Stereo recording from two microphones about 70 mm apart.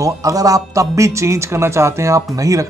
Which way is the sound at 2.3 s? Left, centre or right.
Right.